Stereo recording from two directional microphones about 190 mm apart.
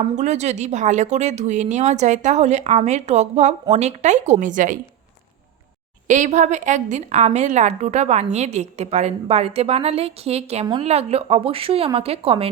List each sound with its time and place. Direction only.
0.2 s speech: 35° right (ahead or behind)
6.1 s speech: 40° right (ahead or behind)